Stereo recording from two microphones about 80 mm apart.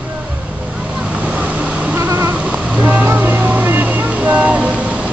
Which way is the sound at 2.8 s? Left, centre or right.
Centre.